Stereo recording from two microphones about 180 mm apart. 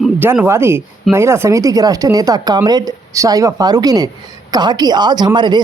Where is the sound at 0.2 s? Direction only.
10° right (ahead or behind).